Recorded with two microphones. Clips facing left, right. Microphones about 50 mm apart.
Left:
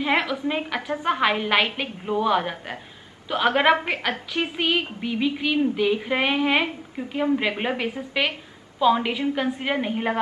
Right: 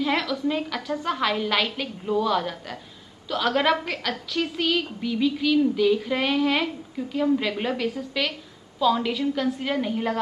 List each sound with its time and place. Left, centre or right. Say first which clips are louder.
0.0 s a woman's voice: left 1 dB; left